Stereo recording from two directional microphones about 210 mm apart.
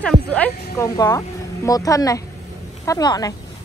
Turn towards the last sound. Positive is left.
turn(degrees=15)  # may be behind; listen again after turning